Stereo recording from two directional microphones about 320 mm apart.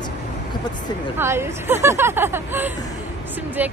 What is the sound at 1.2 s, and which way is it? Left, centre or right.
Speech, centre.